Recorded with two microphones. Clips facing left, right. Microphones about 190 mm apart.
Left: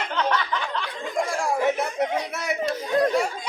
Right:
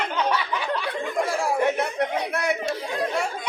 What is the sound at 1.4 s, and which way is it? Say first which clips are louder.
Chatter: even; centre (ahead or behind).